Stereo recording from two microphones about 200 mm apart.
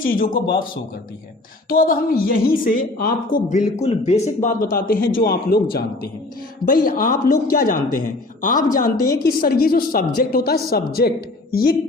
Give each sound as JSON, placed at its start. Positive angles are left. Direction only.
{"t": 0.0, "sound": "speech", "side_deg": 45}
{"t": 1.7, "sound": "speech", "side_deg": 45}
{"t": 4.4, "sound": "speech", "side_deg": 45}